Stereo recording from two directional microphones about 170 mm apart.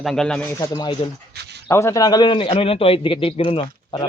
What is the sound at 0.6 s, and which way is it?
A man's voice, 25° left (ahead or behind).